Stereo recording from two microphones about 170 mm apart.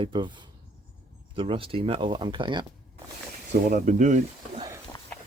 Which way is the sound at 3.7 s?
50° right (ahead or behind).